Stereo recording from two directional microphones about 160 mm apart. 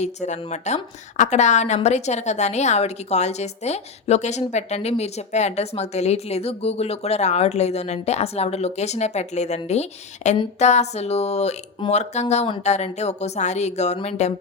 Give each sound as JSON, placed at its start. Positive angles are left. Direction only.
{"t": 0.0, "sound": "a woman's voice", "side_deg": 45}